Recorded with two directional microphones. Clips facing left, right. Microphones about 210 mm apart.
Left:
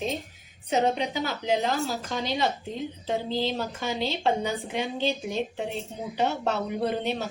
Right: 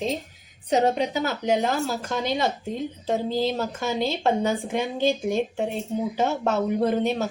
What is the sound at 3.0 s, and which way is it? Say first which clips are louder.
A woman's voice: right 4 dB; 45° right (ahead or behind).